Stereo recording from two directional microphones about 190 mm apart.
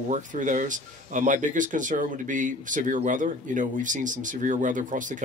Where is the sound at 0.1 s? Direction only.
40° right (ahead or behind).